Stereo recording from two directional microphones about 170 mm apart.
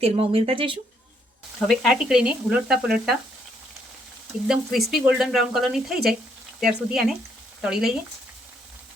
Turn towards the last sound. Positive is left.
turn(degrees=-5)  # may be behind; listen again after turning